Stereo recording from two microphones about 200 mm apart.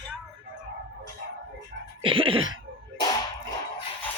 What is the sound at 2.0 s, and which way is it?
Sneeze, 30° right (ahead or behind).